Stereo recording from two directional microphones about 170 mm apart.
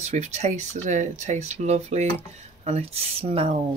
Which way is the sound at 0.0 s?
40° right (ahead or behind).